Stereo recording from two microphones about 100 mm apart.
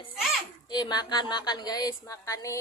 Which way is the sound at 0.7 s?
45° left (ahead or behind).